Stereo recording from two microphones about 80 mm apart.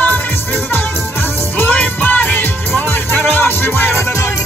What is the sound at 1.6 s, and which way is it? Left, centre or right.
Music, left.